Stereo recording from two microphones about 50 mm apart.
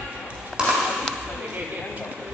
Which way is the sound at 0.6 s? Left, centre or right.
Centre.